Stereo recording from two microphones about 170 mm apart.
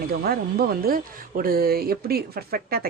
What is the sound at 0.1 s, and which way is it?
Speech, 65° right (ahead or behind).